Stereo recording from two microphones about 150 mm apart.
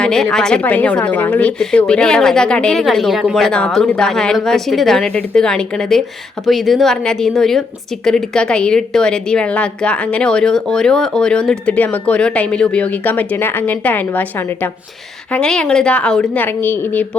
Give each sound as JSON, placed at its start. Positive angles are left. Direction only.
{"t": 0.0, "sound": "a woman's voice", "side_deg": 5}